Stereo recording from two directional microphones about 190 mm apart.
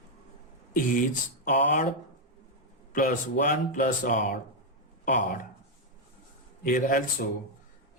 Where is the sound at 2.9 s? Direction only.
45° left (ahead or behind).